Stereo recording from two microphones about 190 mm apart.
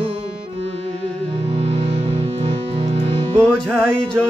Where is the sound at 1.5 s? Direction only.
30° right (ahead or behind).